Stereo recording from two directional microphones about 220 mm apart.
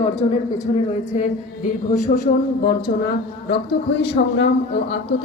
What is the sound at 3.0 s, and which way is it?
A man's voice, 50° left (ahead or behind).